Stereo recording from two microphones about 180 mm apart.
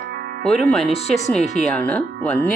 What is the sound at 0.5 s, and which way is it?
Speech, centre (ahead or behind).